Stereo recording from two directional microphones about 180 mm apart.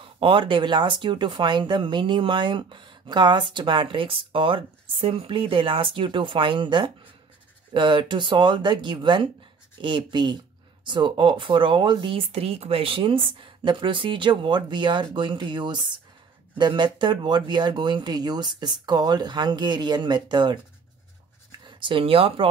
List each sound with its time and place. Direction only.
0.0 s speech: 30° right (ahead or behind)